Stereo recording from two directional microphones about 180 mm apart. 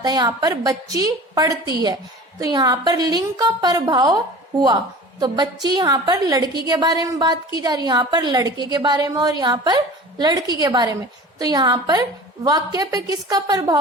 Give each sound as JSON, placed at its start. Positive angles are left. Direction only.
{"t": 0.0, "sound": "a woman's voice", "side_deg": -20}
{"t": 5.2, "sound": "a woman's voice", "side_deg": -25}